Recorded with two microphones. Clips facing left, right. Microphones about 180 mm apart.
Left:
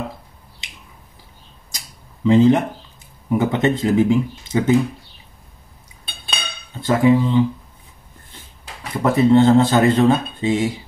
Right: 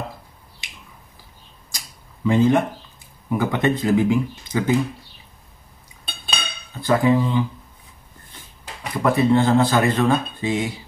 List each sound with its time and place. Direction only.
2.2 s speech: 20° left (ahead or behind)
6.9 s speech: 25° left (ahead or behind)
9.0 s speech: 25° left (ahead or behind)